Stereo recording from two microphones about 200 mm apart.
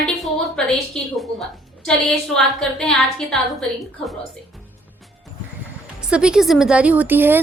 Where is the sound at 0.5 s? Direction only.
Centre (ahead or behind).